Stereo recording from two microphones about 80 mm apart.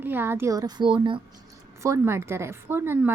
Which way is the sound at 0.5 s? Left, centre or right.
Right.